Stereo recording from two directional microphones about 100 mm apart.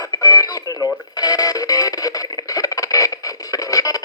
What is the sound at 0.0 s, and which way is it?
Radio, 40° left (ahead or behind).